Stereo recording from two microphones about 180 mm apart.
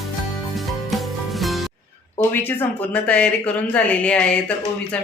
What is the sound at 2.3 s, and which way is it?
A woman's voice, 10° left (ahead or behind).